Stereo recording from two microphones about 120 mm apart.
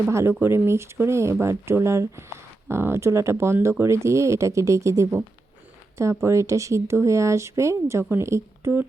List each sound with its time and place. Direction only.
0.1 s speech: 20° right (ahead or behind)
6.2 s speech: 25° right (ahead or behind)